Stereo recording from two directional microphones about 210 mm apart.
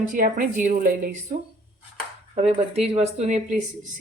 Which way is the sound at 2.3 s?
30° right (ahead or behind).